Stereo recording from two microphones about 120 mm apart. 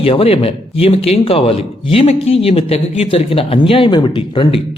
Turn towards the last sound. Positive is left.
turn(degrees=40)  # may be behind; listen again after turning